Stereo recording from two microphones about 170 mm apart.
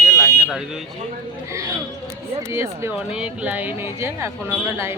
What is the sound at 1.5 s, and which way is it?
Speech, 20° right (ahead or behind).